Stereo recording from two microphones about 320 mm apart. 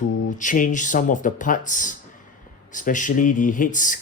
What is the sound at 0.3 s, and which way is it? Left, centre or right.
Speech, left.